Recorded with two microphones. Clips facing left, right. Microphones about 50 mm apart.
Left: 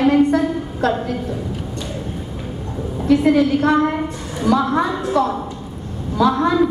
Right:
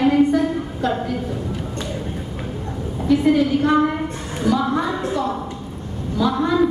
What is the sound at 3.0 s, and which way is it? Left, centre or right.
Speech, left.